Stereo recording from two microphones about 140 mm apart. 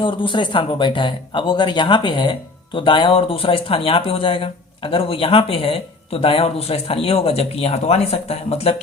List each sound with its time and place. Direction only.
0.0 s speech: 35° left (ahead or behind)